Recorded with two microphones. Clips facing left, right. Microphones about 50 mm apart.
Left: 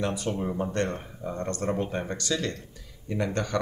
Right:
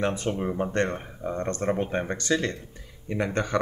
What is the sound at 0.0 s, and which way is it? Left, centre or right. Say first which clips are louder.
Speech: right 2 dB; right.